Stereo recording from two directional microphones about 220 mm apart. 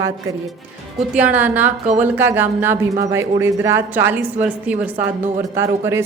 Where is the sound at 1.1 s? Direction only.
5° right (ahead or behind).